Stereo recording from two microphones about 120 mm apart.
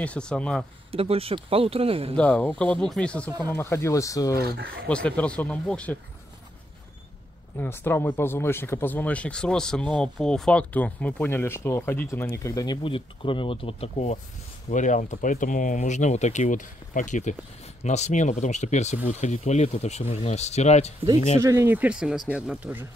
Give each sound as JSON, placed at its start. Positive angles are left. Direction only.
{"t": 0.0, "sound": "speech", "side_deg": 10}
{"t": 0.9, "sound": "speech", "side_deg": -50}
{"t": 2.1, "sound": "speech", "side_deg": 10}
{"t": 3.3, "sound": "speech", "side_deg": -30}
{"t": 3.5, "sound": "speech", "side_deg": 20}
{"t": 4.8, "sound": "speech", "side_deg": 10}
{"t": 7.5, "sound": "speech", "side_deg": 20}
{"t": 12.6, "sound": "speech", "side_deg": 45}
{"t": 14.7, "sound": "speech", "side_deg": 90}
{"t": 17.8, "sound": "speech", "side_deg": 70}
{"t": 21.4, "sound": "speech", "side_deg": -25}